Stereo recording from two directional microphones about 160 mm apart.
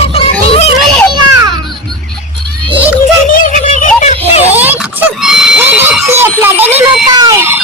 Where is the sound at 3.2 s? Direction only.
60° left (ahead or behind).